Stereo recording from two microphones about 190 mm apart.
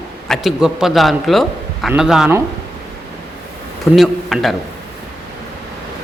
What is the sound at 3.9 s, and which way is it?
Speech, centre (ahead or behind).